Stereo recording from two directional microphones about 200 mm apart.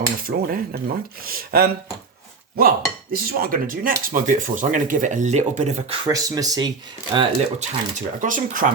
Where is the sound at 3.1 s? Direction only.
45° right (ahead or behind).